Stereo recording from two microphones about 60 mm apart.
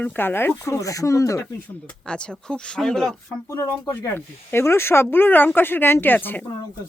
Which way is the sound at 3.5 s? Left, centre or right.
Left.